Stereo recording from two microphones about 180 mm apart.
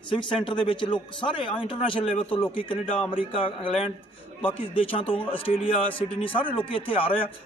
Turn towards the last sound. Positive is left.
turn(degrees=30)  # may be behind; listen again after turning